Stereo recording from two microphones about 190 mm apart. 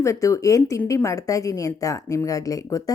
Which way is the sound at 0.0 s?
15° left (ahead or behind).